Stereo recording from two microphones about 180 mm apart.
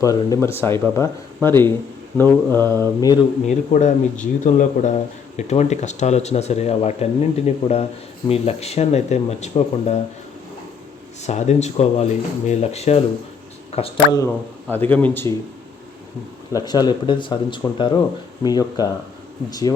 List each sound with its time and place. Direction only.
0.0 s speech: 20° left (ahead or behind)
3.4 s speech: 40° left (ahead or behind)
11.2 s speech: 40° left (ahead or behind)
14.1 s speech: 15° left (ahead or behind)
16.5 s speech: 20° left (ahead or behind)